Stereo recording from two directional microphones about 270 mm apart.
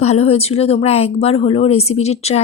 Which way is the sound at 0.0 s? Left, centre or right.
Left.